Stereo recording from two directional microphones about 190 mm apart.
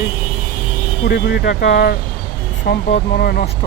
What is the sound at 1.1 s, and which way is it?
Speech, 60° left (ahead or behind).